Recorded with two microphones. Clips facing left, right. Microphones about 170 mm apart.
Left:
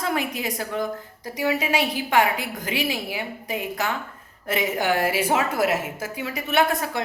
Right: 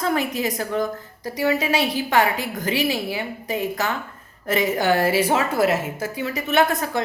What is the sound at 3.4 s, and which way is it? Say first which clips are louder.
Speech: right 6 dB; 40° right (ahead or behind).